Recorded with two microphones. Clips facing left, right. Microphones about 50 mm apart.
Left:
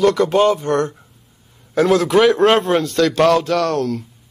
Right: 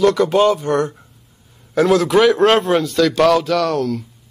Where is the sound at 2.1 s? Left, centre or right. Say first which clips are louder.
Even; centre.